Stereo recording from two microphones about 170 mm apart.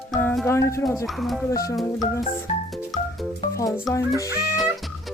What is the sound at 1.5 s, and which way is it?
Speech, 20° left (ahead or behind).